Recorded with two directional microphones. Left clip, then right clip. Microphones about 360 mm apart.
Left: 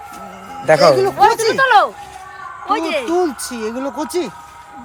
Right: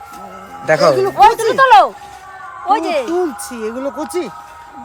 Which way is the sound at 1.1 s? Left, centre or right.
Right.